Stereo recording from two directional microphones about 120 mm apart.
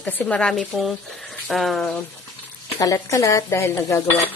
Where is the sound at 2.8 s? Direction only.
30° left (ahead or behind).